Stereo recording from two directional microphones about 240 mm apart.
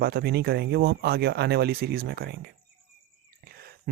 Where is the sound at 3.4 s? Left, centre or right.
Right.